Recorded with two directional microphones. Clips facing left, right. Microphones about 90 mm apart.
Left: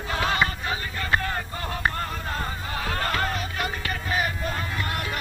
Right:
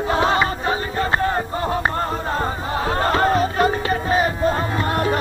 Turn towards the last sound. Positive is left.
turn(degrees=-35)  # may be behind; listen again after turning